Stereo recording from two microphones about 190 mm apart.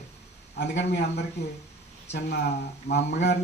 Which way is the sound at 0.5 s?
65° left (ahead or behind).